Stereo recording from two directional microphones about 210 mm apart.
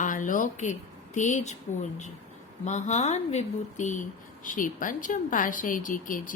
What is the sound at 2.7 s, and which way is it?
Speech, 35° left (ahead or behind).